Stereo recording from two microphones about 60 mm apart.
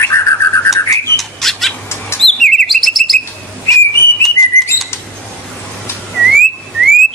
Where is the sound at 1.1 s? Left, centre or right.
Centre.